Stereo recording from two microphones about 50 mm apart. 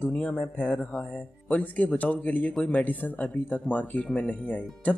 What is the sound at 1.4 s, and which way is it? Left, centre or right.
Speech, left.